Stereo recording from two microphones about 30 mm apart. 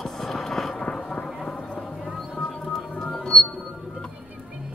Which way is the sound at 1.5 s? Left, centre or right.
Left.